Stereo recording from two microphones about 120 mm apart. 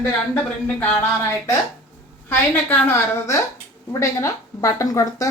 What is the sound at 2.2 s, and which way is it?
A woman's voice, 20° left (ahead or behind).